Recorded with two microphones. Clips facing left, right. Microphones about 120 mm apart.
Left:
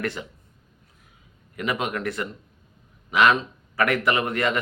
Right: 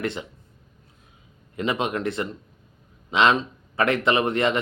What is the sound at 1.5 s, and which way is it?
A man's voice, 25° right (ahead or behind).